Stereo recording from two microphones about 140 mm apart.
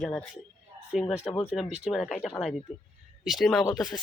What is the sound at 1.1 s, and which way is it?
Speech, 10° right (ahead or behind).